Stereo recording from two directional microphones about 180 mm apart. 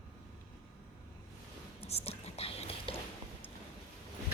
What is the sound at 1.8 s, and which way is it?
Whispering, 35° left (ahead or behind).